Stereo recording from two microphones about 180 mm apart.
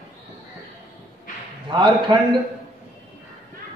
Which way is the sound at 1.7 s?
25° right (ahead or behind).